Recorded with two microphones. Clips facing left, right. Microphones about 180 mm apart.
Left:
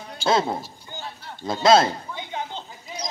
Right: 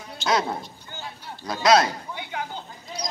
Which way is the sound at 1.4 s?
25° left (ahead or behind).